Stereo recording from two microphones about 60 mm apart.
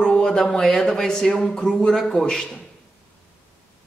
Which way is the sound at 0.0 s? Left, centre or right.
Centre.